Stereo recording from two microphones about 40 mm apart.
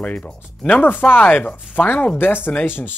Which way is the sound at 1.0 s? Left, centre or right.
Left.